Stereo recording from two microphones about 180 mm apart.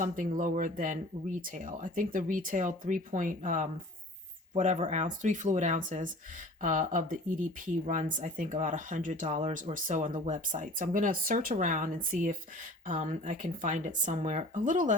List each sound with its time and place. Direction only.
0.0 s speech: 50° right (ahead or behind)